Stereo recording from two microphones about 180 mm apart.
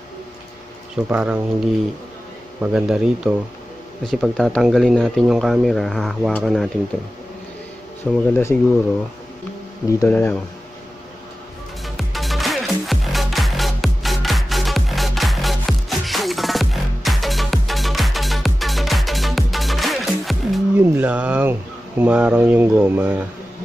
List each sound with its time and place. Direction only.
0.9 s speech: 5° right (ahead or behind)
8.0 s speech: centre (ahead or behind)
9.8 s speech: 15° left (ahead or behind)
11.8 s music: centre (ahead or behind)
20.7 s a sound: 10° right (ahead or behind)